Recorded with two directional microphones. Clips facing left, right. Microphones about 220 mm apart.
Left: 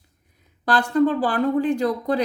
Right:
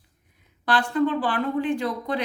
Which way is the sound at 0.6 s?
40° left (ahead or behind).